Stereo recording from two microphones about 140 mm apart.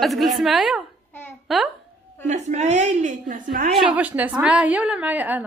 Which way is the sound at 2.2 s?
55° right (ahead or behind).